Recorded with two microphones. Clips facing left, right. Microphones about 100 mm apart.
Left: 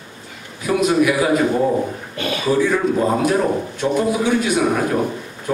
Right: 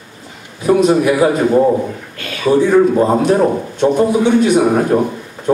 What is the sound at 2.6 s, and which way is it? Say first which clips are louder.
A man's voice: right 9 dB; 30° right (ahead or behind).